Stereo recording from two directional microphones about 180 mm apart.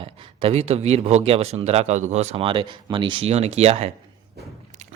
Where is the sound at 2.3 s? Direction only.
30° right (ahead or behind).